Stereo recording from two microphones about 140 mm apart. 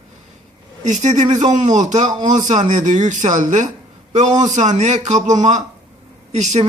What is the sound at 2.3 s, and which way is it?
A man's voice, 60° right (ahead or behind).